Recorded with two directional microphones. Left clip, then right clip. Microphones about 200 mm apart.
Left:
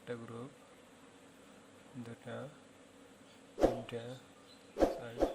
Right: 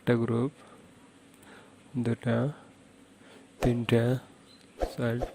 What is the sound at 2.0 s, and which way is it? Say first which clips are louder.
Speech: right 16 dB; 50° right (ahead or behind).